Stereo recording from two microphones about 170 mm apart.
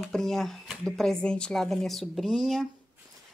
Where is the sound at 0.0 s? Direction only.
Centre (ahead or behind).